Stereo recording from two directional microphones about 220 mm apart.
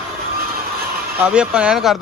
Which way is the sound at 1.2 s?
5° right (ahead or behind).